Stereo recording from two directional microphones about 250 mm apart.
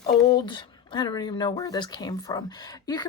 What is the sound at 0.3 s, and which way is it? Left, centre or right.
A woman's voice, centre.